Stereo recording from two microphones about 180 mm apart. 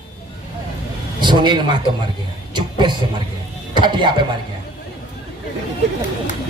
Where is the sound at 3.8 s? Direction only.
25° right (ahead or behind).